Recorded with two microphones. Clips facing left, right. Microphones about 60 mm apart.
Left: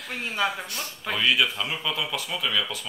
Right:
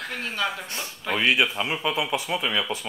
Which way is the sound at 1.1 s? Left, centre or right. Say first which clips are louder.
Right 2 dB; right.